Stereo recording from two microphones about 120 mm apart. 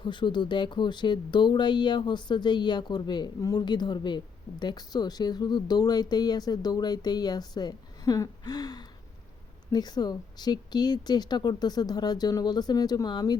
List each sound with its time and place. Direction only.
0.0 s speech: 40° left (ahead or behind)